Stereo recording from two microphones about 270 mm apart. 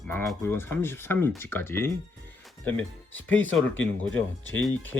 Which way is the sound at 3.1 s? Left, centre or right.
Left.